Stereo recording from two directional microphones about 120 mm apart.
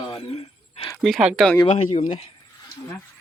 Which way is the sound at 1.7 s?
55° left (ahead or behind).